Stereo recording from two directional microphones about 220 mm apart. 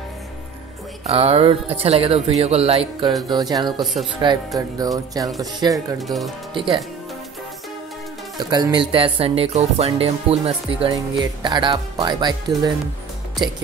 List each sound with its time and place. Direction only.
1.0 s music: 30° right (ahead or behind)
3.8 s speech: centre (ahead or behind)
4.6 s music: 15° right (ahead or behind)
5.9 s speech: centre (ahead or behind)
6.5 s music: 25° right (ahead or behind)
8.4 s music: 20° right (ahead or behind)